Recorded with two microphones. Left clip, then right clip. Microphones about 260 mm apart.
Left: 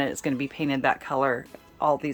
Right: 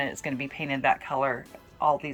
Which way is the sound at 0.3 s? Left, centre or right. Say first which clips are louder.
Left 3 dB; left.